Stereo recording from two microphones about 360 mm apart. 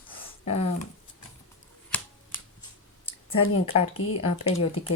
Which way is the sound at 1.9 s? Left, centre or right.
Centre.